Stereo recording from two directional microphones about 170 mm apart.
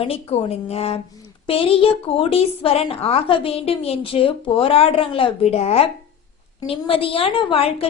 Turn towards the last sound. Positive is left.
turn(degrees=35)  # may be behind; listen again after turning